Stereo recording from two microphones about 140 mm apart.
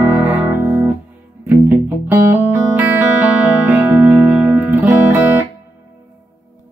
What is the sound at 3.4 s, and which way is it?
Music, 10° right (ahead or behind).